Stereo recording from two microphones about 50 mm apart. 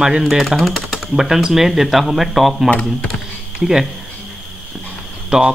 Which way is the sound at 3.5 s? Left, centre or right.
Centre.